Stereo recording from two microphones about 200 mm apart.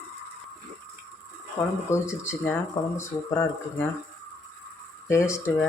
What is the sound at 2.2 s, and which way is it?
Speech, 15° left (ahead or behind).